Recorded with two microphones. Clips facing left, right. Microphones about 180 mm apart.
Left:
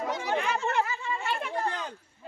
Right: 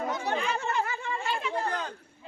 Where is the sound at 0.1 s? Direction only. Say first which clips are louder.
Left 1 dB; 80° left.